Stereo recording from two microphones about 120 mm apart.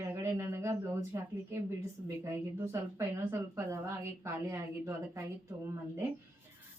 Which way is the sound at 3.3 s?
20° right (ahead or behind).